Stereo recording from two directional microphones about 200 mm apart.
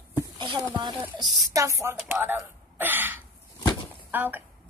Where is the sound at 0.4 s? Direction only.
25° right (ahead or behind).